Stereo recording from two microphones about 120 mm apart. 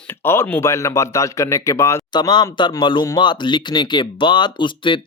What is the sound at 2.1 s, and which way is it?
Speech, 40° left (ahead or behind).